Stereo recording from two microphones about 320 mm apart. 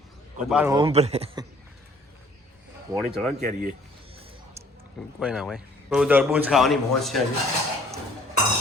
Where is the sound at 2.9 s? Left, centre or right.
Centre.